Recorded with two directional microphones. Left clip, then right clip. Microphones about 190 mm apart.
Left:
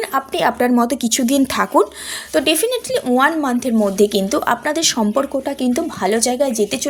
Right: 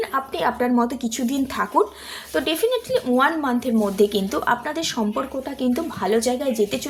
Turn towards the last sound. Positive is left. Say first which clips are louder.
# left 5 dB
turn(degrees=40)  # may be behind; listen again after turning